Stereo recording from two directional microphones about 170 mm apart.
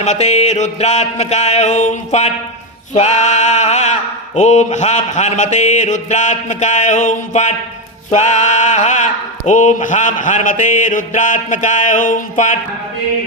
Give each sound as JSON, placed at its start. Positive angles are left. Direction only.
{"t": 0.0, "sound": "music", "side_deg": 40}
{"t": 2.9, "sound": "mantra", "side_deg": 45}